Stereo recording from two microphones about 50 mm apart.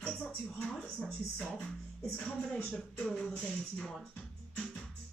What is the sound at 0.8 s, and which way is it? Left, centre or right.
Speech, left.